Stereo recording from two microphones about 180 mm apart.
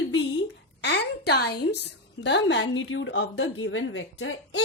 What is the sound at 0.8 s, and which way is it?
Speech, 65° left (ahead or behind).